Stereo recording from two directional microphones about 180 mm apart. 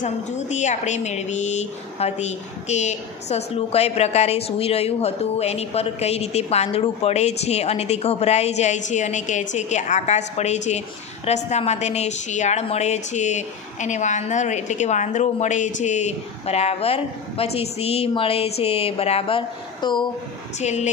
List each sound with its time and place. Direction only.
0.0 s a woman's voice: 40° left (ahead or behind)
20.5 s a woman's voice: 40° left (ahead or behind)